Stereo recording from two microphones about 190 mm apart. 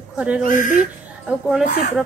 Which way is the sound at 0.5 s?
45° left (ahead or behind).